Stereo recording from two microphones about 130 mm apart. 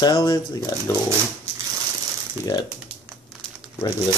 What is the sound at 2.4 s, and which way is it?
Speech, 30° left (ahead or behind).